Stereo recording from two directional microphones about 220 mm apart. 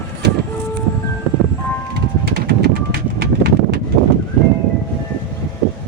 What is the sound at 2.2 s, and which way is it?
Pigeon, 45° right (ahead or behind).